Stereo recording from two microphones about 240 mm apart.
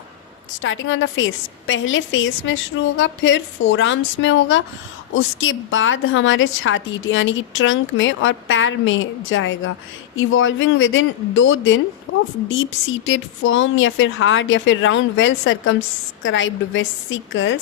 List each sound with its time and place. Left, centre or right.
0.6 s a woman's voice: left